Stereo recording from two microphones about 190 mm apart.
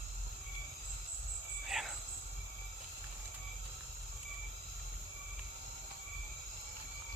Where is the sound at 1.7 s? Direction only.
Centre (ahead or behind).